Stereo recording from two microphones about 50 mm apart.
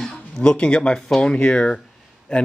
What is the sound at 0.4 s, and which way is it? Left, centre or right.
Speech, centre.